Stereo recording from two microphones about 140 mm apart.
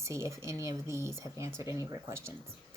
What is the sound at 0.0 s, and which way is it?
Speech, 20° right (ahead or behind).